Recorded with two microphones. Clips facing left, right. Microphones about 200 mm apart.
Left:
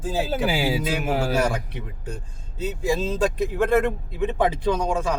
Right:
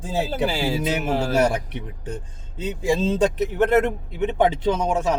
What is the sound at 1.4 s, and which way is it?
A man's voice, 20° right (ahead or behind).